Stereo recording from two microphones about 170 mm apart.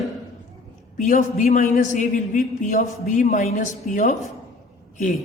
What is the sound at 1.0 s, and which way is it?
A man's voice, 50° left (ahead or behind).